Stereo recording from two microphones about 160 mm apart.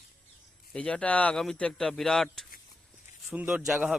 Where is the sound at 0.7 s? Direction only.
5° left (ahead or behind).